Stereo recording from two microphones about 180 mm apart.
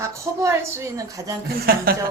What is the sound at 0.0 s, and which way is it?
Speech, 15° right (ahead or behind).